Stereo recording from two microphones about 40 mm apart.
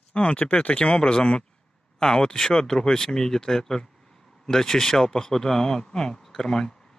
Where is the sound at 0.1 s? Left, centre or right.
Left.